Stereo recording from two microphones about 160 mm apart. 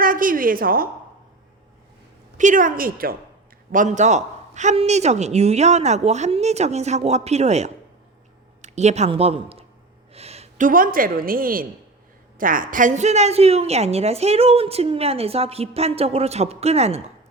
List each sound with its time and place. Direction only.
0.0 s a woman's voice: 60° right (ahead or behind)
2.4 s a woman's voice: 55° right (ahead or behind)
3.7 s a man's voice: 50° right (ahead or behind)
10.1 s a sound: 40° right (ahead or behind)
10.7 s a woman's voice: 60° right (ahead or behind); by 17.1 s 40° right (ahead or behind)